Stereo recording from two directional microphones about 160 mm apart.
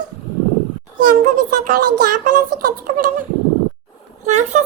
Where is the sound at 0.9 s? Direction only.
55° right (ahead or behind).